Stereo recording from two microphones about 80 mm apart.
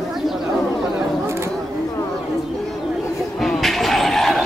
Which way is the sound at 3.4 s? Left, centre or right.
Centre.